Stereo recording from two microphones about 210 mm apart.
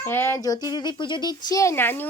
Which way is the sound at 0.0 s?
10° left (ahead or behind).